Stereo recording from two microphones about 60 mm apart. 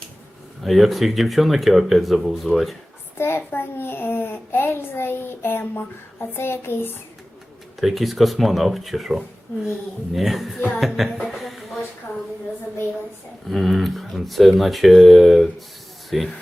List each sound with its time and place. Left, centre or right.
0.6 s speech: centre
3.2 s a child's voice: left
7.8 s speech: centre
11.3 s a sound: centre
13.5 s speech: centre